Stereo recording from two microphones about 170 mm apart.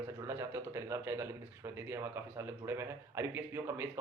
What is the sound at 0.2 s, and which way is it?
A man's voice, 15° right (ahead or behind).